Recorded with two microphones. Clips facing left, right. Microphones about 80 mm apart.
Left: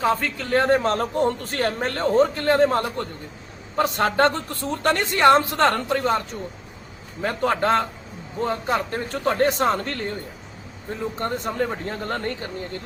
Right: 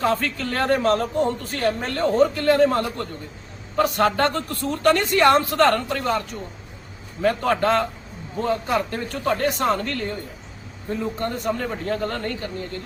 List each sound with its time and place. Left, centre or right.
0.0 s speech: centre
0.9 s a man's voice: left
11.2 s speech: left